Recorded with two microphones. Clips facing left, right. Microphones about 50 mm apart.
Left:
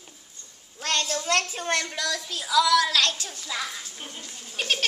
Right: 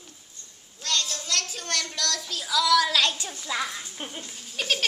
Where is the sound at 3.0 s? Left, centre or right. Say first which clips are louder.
Even; centre.